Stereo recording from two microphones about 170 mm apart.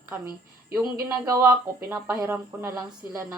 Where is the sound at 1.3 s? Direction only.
15° right (ahead or behind).